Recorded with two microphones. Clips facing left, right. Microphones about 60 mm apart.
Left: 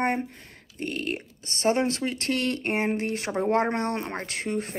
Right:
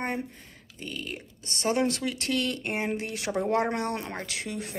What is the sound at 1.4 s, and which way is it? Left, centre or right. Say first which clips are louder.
Speech: left 2 dB; left.